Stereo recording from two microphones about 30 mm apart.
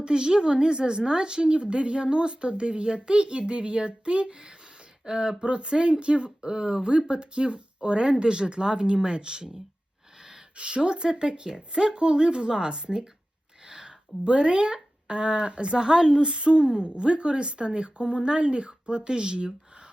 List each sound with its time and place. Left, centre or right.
0.0 s a woman's voice: right
10.6 s speech: right
13.7 s a sound: right
14.3 s a woman's voice: right
15.9 s speech: centre
16.2 s a woman's voice: right